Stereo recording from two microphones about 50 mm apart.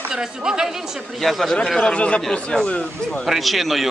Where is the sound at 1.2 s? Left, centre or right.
Centre.